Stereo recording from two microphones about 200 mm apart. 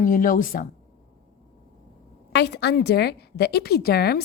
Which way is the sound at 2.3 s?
60° left (ahead or behind).